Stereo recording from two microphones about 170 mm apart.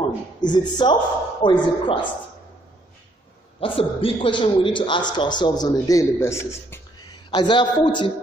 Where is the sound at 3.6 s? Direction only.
30° left (ahead or behind); by 6.8 s 15° left (ahead or behind).